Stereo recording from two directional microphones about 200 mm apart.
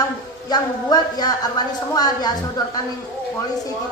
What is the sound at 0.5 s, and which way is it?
Speech, 20° left (ahead or behind).